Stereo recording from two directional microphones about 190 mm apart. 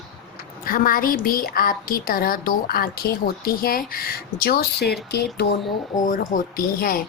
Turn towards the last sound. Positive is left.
turn(degrees=50)  # may be behind; listen again after turning